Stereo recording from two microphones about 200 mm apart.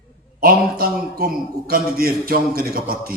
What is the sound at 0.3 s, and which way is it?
A man's voice, 45° right (ahead or behind).